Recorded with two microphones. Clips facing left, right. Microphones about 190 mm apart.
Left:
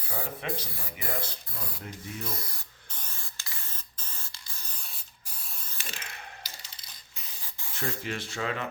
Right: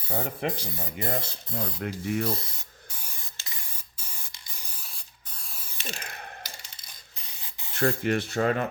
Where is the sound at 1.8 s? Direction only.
75° right (ahead or behind).